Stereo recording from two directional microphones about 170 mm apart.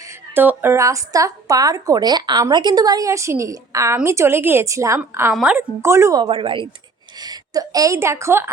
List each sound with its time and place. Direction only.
0.3 s a woman's voice: 10° right (ahead or behind)
5.3 s a woman's voice: centre (ahead or behind)
5.5 s speech: 15° right (ahead or behind)
6.2 s a woman's voice: 30° right (ahead or behind); by 8.4 s 15° right (ahead or behind)